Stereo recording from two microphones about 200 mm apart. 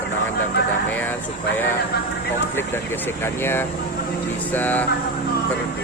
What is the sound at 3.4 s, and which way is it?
A man's voice, 10° left (ahead or behind).